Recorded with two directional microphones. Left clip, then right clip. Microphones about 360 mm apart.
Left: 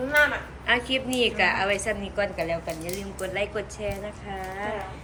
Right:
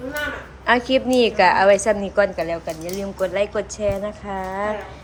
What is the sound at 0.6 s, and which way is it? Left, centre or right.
A woman's voice, centre.